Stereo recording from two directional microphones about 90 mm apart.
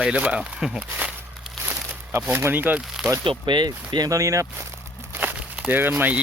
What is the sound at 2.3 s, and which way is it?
Speech, 25° right (ahead or behind).